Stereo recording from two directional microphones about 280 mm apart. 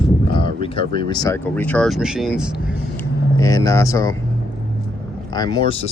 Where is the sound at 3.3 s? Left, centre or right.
Centre.